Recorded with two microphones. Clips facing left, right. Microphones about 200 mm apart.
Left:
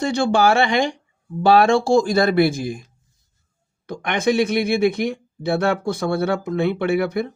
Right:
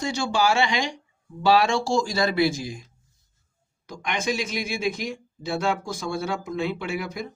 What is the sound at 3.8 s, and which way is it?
Speech, 60° left (ahead or behind).